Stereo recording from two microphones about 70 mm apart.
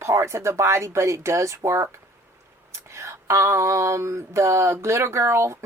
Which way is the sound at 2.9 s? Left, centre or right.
Right.